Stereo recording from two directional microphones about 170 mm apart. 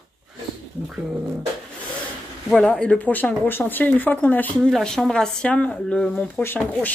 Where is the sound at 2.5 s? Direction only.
5° left (ahead or behind).